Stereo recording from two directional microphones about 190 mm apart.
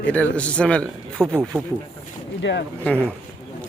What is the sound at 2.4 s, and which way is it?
Speech, 70° left (ahead or behind).